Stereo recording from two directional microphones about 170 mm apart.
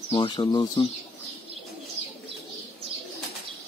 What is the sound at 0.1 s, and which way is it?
Speech, 30° left (ahead or behind).